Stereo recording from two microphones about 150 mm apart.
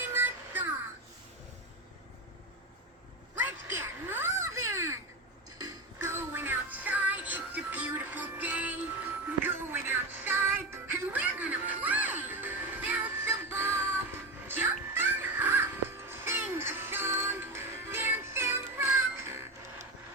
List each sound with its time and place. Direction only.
0.1 s music: 15° right (ahead or behind)
3.3 s a sound: 15° right (ahead or behind)
5.6 s music: 15° right (ahead or behind)